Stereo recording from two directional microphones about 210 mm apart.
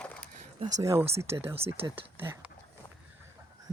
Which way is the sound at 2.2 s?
10° right (ahead or behind).